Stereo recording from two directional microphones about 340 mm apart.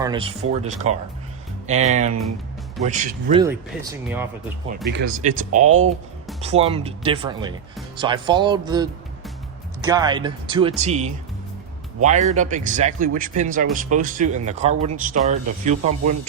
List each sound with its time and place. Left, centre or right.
0.0 s speech: centre
3.4 s speech: centre
4.9 s speech: right